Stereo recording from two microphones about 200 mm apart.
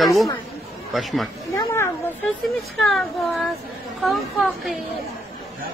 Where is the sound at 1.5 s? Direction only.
15° left (ahead or behind).